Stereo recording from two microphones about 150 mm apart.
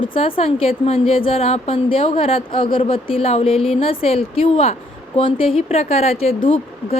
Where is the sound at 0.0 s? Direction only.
35° left (ahead or behind).